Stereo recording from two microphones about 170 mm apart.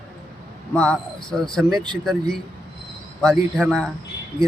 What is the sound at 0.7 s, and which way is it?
Speech, 5° left (ahead or behind).